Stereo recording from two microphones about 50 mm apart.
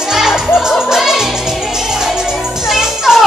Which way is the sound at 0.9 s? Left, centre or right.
Centre.